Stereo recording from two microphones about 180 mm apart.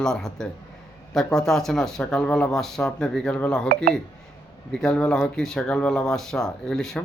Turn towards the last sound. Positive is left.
turn(degrees=5)  # may be behind; listen again after turning